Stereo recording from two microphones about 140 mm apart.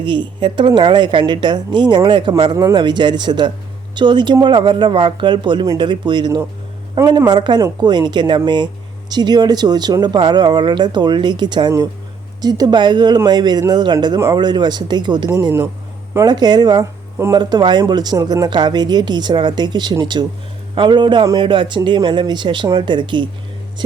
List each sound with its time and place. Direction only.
0.0 s speech: 35° right (ahead or behind)
15.3 s speech: 20° right (ahead or behind)